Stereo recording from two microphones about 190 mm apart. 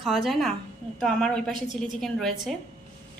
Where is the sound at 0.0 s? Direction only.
Centre (ahead or behind).